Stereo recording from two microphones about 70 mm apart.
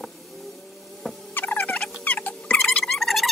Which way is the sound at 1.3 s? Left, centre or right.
Left.